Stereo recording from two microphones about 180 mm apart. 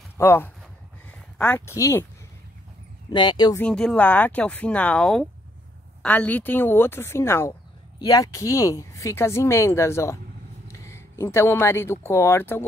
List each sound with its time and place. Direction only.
0.2 s speech: 15° left (ahead or behind)
3.1 s speech: 25° left (ahead or behind)
3.5 s speech: 5° left (ahead or behind)